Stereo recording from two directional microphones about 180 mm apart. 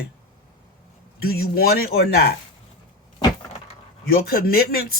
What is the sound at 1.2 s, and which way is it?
Speech, 60° left (ahead or behind).